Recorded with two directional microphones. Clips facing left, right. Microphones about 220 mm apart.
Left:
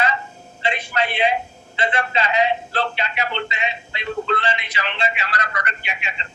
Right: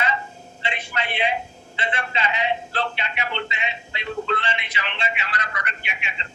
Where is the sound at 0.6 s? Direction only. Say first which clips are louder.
Left 6 dB; 40° left (ahead or behind).